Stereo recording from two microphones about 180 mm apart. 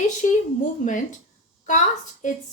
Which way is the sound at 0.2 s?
40° left (ahead or behind).